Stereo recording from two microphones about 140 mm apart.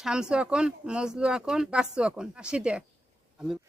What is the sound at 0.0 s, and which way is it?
Speech, 5° right (ahead or behind).